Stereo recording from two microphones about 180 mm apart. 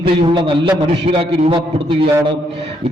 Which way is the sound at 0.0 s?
30° right (ahead or behind).